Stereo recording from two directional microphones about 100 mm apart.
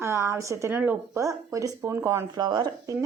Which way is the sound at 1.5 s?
35° right (ahead or behind).